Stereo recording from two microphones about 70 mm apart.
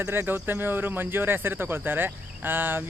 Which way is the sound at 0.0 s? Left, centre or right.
Right.